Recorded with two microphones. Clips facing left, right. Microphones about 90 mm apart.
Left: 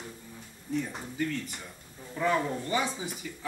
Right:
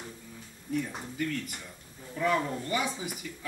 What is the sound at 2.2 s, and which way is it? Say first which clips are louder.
Speech: even; 30° left (ahead or behind).